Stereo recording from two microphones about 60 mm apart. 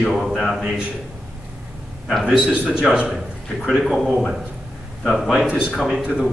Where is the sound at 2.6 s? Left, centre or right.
Centre.